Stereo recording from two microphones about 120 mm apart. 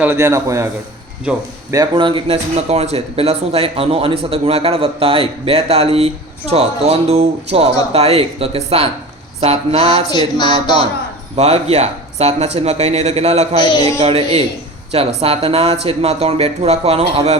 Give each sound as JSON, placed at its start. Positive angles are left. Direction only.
{"t": 0.0, "sound": "a man's voice", "side_deg": -20}
{"t": 2.0, "sound": "speech", "side_deg": -45}
{"t": 10.1, "sound": "a sound", "side_deg": 40}
{"t": 11.3, "sound": "speech", "side_deg": -60}
{"t": 13.6, "sound": "a sound", "side_deg": 35}
{"t": 14.0, "sound": "speech", "side_deg": -55}